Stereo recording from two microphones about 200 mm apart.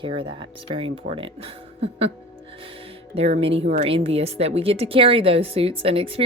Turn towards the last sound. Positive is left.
turn(degrees=-30)  # may be behind; listen again after turning